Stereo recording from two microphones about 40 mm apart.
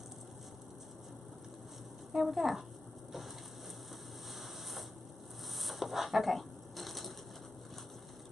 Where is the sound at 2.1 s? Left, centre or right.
Centre.